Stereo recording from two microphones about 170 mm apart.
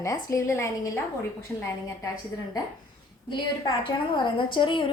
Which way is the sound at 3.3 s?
25° left (ahead or behind).